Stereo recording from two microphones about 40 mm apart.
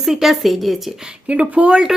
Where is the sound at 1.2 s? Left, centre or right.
Right.